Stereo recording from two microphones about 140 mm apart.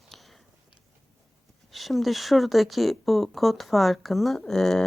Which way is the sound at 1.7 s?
Centre (ahead or behind).